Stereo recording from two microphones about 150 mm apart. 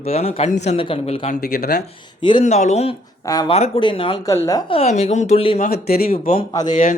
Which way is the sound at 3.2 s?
25° left (ahead or behind).